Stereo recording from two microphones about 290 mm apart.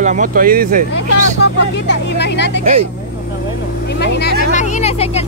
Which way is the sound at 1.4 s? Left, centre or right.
Left.